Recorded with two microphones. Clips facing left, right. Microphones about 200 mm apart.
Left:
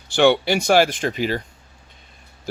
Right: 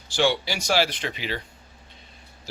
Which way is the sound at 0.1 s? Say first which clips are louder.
Left 8 dB; 60° left (ahead or behind).